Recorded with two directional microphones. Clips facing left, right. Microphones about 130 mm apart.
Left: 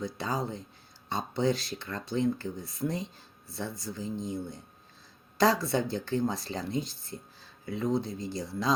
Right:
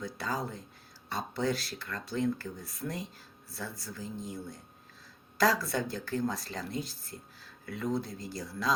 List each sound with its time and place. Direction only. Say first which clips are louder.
0.0 s speech: left 3 dB; 25° left (ahead or behind)
3.5 s speech: left 5 dB; 20° left (ahead or behind)